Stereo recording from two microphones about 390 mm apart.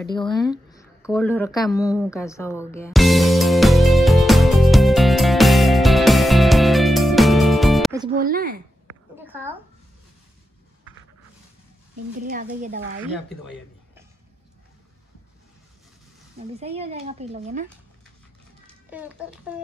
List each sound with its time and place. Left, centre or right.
0.1 s a sound: centre
8.2 s speech: right
9.2 s a sound: centre
12.3 s speech: centre
16.5 s speech: centre
18.9 s a child's voice: centre